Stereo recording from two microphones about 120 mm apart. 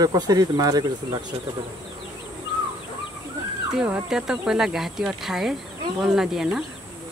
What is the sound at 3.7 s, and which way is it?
Speech, 5° right (ahead or behind).